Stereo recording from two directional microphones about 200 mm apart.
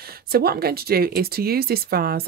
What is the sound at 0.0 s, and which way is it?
Speech, 50° right (ahead or behind).